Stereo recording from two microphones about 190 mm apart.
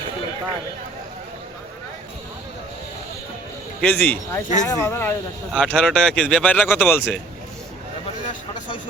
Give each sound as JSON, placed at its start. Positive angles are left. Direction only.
{"t": 3.8, "sound": "speech", "side_deg": 10}